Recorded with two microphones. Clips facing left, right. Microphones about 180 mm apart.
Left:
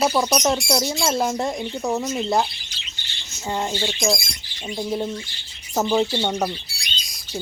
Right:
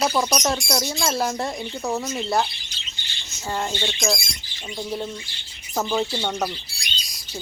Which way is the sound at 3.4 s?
15° left (ahead or behind).